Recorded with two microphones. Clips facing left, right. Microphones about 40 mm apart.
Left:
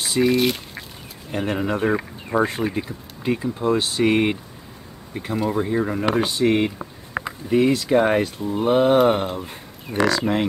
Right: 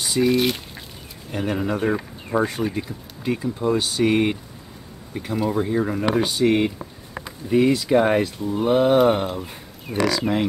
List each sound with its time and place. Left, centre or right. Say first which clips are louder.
0.0 s speech: even; centre
0.4 s speech: left 1 dB; centre
1.3 s speech: left 1 dB; centre
9.9 s speech: left 2 dB; centre